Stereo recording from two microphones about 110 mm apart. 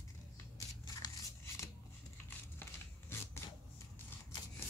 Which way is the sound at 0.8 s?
35° left (ahead or behind).